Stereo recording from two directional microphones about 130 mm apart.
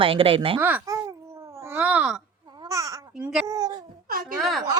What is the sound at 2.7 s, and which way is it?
Babbling, 25° right (ahead or behind).